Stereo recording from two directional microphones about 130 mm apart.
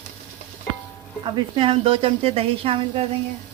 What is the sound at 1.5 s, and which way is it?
Speech, 45° right (ahead or behind).